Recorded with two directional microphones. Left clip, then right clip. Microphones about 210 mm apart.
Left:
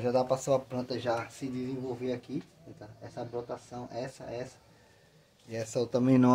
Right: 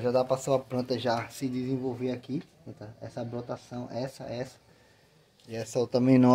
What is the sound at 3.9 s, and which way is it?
Speech, 50° right (ahead or behind).